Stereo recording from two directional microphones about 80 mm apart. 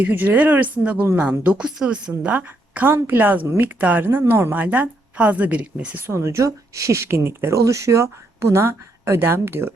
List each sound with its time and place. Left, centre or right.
0.0 s a woman's voice: right